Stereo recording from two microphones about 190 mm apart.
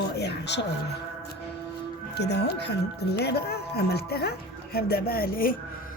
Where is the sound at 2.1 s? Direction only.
60° left (ahead or behind).